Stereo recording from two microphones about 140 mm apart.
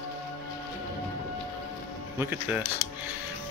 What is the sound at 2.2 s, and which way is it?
Speech, 15° right (ahead or behind).